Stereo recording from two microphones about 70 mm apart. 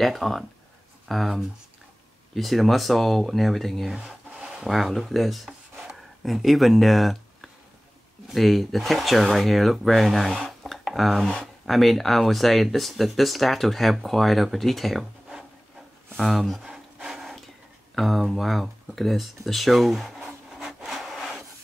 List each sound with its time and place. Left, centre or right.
0.0 s speech: centre
3.9 s rub: centre
4.6 s speech: centre
10.6 s a sound: centre
11.6 s speech: centre
16.2 s a sound: centre